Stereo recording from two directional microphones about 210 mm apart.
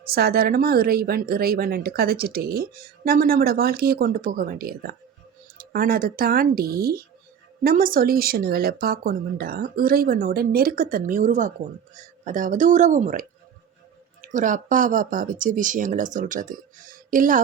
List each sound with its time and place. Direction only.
0.0 s speech: 45° right (ahead or behind)
14.3 s speech: 40° right (ahead or behind)